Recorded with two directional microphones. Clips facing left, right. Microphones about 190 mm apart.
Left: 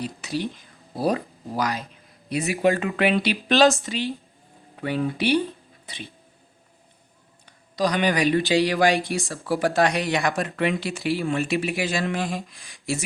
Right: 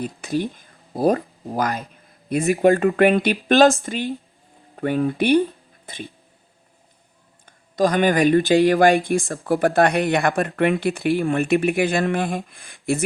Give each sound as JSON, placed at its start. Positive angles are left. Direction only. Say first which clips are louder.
{"t": 0.0, "sound": "speech", "louder": "right 4 dB", "side_deg": -50}
{"t": 7.4, "sound": "speech", "louder": "right 5 dB", "side_deg": -50}